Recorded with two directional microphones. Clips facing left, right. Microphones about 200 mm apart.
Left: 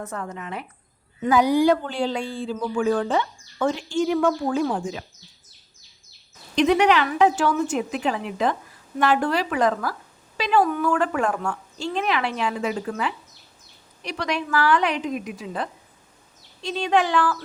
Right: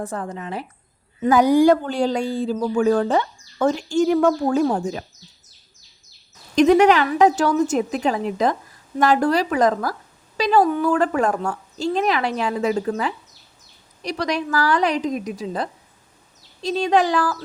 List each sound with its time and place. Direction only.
0.0 s speech: 30° right (ahead or behind)
1.2 s speech: 45° right (ahead or behind)
6.6 s speech: 45° right (ahead or behind)